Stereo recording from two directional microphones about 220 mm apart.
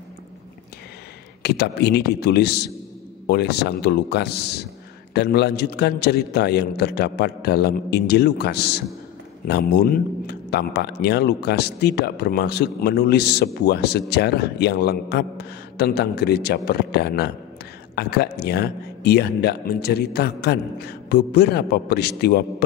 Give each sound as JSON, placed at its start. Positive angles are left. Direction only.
{"t": 1.4, "sound": "speech", "side_deg": 50}